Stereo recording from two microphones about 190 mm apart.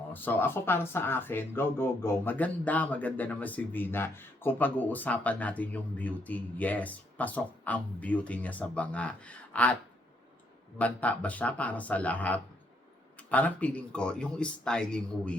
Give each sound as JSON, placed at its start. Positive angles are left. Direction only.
{"t": 0.1, "sound": "speech", "side_deg": 10}
{"t": 10.8, "sound": "speech", "side_deg": 5}